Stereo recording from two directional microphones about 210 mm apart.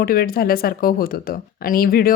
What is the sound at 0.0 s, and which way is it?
A woman's voice, 45° left (ahead or behind).